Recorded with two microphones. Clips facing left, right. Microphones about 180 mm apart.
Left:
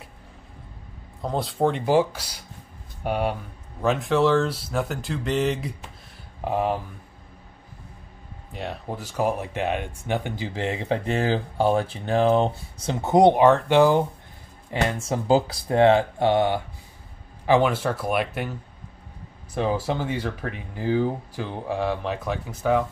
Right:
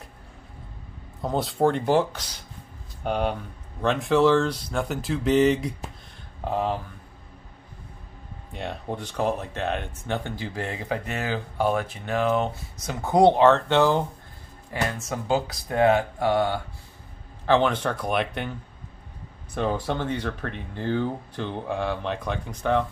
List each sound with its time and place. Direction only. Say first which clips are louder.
1.2 s speech: right 1 dB; centre (ahead or behind)
6.4 s speech: left 2 dB; 15° left (ahead or behind)
8.5 s speech: even; centre (ahead or behind); by 16.6 s 20° left (ahead or behind)
17.5 s speech: left 1 dB; 10° left (ahead or behind)